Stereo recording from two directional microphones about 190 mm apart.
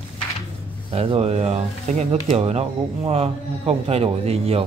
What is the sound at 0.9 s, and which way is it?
Speech, 35° right (ahead or behind).